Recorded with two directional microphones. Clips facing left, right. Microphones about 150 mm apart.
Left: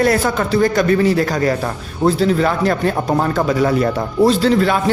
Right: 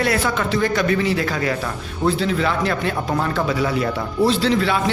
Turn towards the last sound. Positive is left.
turn(degrees=45)  # may be behind; listen again after turning